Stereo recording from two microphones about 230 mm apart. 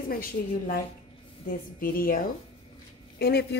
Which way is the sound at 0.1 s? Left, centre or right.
Left.